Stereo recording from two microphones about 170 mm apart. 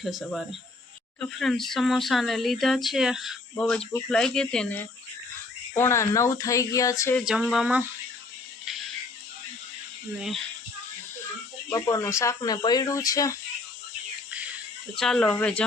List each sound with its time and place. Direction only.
0.0 s speech: centre (ahead or behind)
5.7 s speech: 15° left (ahead or behind)
7.3 s speech: 5° right (ahead or behind)
10.2 s speech: centre (ahead or behind)
11.7 s speech: 20° left (ahead or behind)
14.9 s speech: 5° left (ahead or behind)